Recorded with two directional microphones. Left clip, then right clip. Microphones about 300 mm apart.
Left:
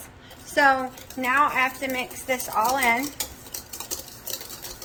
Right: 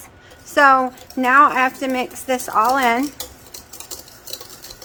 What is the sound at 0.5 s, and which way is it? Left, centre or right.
A woman's voice, centre.